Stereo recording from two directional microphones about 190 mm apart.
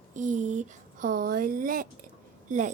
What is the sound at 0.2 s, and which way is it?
Speech, 40° right (ahead or behind).